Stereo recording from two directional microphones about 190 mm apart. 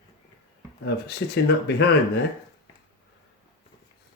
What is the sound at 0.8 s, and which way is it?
Speech, 60° left (ahead or behind).